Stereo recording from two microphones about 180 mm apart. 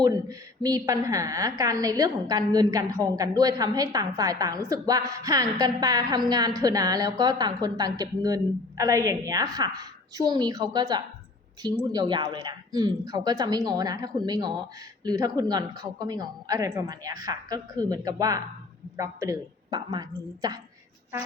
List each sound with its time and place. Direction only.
0.0 s a woman's voice: 20° right (ahead or behind)